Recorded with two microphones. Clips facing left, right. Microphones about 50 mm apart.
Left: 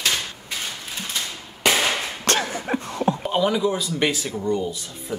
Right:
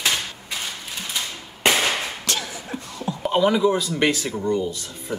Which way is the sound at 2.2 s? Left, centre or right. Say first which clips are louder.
Left 6 dB; left.